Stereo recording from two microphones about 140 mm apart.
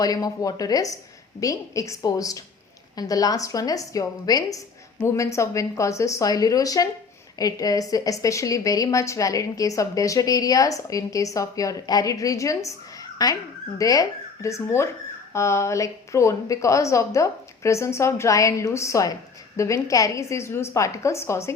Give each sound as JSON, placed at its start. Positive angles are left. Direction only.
{"t": 0.0, "sound": "a woman's voice", "side_deg": 25}